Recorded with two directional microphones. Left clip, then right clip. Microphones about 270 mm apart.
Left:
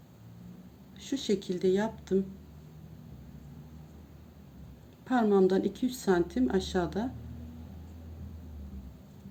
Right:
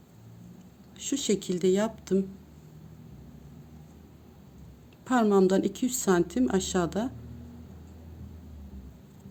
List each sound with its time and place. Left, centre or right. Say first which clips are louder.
0.9 s speech: right 3 dB; right
5.0 s speech: right 2 dB; right